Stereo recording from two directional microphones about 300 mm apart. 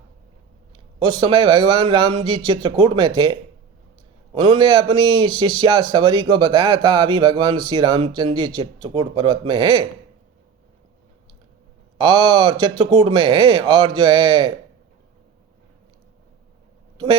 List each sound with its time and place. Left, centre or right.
1.2 s a man's voice: centre
11.9 s a man's voice: centre